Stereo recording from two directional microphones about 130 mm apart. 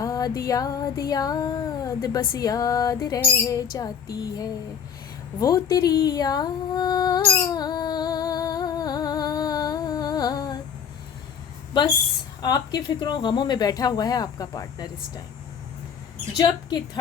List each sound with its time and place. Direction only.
0.0 s speech: 25° left (ahead or behind)
7.3 s humming: 30° left (ahead or behind)
12.4 s speech: 30° left (ahead or behind)
16.4 s speech: 35° left (ahead or behind)